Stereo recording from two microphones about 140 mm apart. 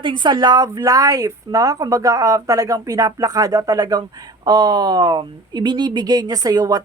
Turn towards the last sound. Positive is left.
turn(degrees=-25)  # may be behind; listen again after turning